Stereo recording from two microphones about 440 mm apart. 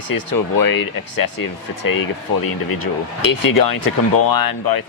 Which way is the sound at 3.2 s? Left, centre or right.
Left.